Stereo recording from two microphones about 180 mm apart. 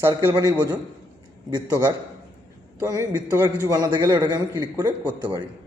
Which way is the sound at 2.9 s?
20° right (ahead or behind).